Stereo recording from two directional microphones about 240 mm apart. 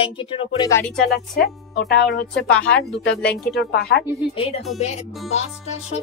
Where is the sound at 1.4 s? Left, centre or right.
Left.